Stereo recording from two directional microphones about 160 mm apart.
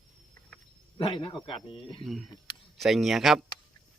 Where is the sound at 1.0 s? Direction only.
35° left (ahead or behind).